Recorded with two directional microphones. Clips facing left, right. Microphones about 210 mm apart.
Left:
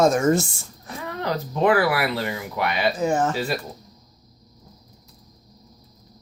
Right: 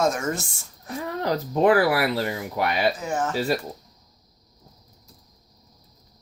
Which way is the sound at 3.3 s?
40° right (ahead or behind).